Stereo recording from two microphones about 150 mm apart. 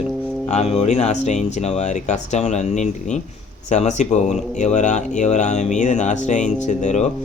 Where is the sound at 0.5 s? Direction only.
45° left (ahead or behind).